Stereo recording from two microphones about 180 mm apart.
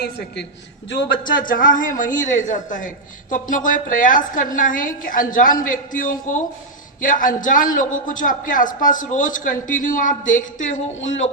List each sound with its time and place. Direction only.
0.9 s a man's voice: 75° left (ahead or behind)
1.4 s a man's voice: 50° left (ahead or behind)